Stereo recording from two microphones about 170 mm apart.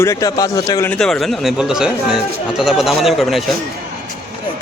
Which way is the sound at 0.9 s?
5° left (ahead or behind).